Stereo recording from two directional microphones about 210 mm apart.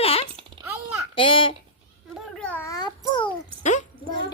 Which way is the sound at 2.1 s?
5° left (ahead or behind).